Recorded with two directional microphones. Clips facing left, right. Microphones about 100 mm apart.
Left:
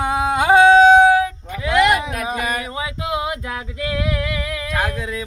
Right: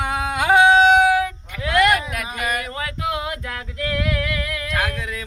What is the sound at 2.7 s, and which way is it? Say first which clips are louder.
Male singing: left 1 dB; 15° left (ahead or behind).